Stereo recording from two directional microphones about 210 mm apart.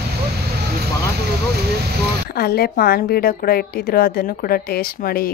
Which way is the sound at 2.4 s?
50° left (ahead or behind).